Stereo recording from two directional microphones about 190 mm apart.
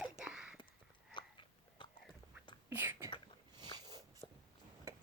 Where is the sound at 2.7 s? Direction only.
10° right (ahead or behind).